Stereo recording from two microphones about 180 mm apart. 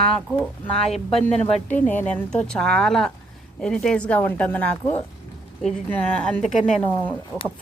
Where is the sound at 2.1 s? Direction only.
5° left (ahead or behind).